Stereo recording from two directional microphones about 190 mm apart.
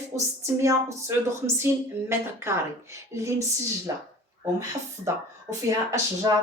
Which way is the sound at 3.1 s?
15° right (ahead or behind).